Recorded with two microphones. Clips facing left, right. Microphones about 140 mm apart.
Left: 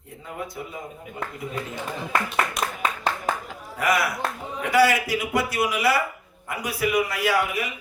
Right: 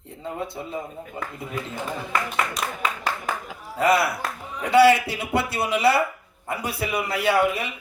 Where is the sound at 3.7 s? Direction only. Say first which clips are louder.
Right 3 dB; 30° right (ahead or behind).